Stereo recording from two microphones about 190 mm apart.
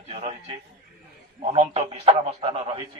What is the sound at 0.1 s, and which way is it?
A man's voice, 35° right (ahead or behind).